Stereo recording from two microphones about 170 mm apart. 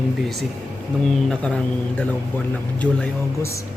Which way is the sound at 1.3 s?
5° left (ahead or behind).